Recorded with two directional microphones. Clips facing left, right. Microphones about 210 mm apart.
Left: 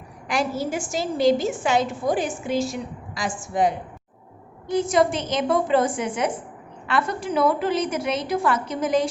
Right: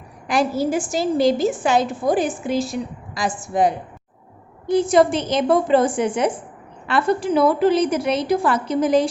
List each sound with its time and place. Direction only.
0.3 s a woman's voice: 35° right (ahead or behind)